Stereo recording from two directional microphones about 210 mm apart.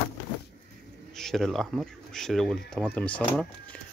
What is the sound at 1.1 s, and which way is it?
Speech, centre (ahead or behind).